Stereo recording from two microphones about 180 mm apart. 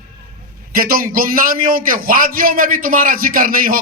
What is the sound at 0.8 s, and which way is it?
A man's voice, 55° right (ahead or behind).